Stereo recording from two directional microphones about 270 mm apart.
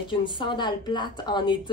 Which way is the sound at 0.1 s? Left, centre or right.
Centre.